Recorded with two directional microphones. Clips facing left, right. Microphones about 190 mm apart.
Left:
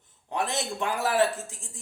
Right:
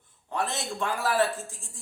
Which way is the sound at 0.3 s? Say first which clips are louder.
Left 1 dB; 15° left (ahead or behind).